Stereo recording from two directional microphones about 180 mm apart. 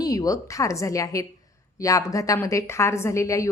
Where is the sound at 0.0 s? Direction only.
20° left (ahead or behind).